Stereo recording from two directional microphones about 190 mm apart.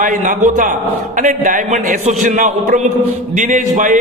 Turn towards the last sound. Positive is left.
turn(degrees=-45)  # may be behind; listen again after turning